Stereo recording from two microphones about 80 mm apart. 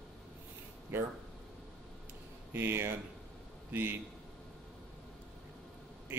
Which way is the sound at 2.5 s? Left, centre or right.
Right.